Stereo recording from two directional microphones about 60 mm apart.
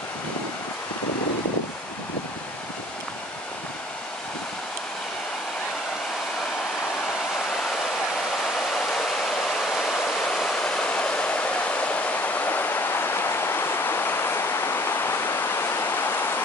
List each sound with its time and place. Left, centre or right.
8.7 s waterfall: centre; by 16.3 s left